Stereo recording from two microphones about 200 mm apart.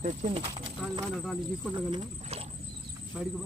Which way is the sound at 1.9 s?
25° right (ahead or behind).